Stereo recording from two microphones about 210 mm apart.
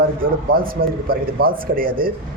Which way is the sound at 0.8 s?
50° right (ahead or behind).